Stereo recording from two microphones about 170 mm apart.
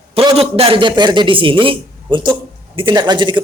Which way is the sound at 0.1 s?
35° right (ahead or behind).